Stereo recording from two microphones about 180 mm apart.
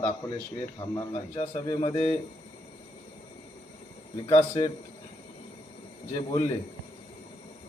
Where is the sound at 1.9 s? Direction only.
35° left (ahead or behind).